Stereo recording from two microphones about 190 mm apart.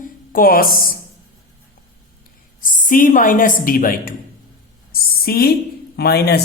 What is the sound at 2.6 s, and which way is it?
A woman's voice, 45° left (ahead or behind).